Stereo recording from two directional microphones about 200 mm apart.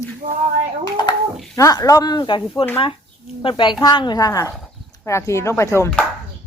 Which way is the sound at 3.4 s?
25° left (ahead or behind).